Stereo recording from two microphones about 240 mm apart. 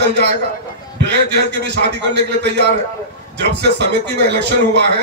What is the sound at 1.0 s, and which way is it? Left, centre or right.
A man's voice, right.